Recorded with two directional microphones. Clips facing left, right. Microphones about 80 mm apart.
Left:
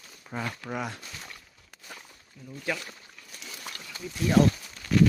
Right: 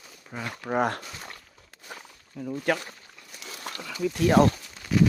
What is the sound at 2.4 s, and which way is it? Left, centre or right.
Speech, right.